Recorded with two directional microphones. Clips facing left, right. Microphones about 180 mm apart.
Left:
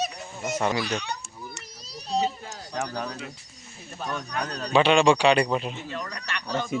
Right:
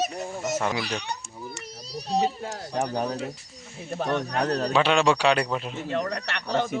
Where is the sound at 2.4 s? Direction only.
60° right (ahead or behind).